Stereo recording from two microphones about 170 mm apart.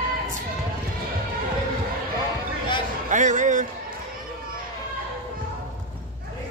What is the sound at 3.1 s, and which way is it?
Music, 45° right (ahead or behind).